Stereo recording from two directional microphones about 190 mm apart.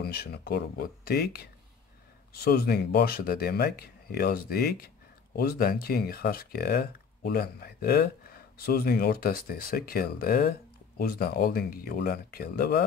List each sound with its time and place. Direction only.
0.0 s speech: 55° left (ahead or behind)